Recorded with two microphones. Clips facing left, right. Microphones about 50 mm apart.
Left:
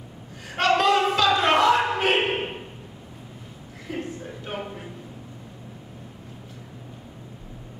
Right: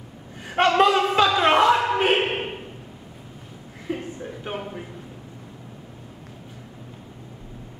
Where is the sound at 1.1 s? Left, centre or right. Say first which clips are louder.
Right 2 dB; right.